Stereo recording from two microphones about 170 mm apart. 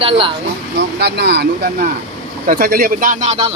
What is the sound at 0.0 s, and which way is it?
Speech, 30° right (ahead or behind).